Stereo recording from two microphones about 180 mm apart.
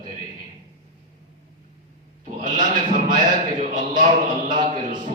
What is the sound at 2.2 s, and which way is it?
Bleat, 45° right (ahead or behind).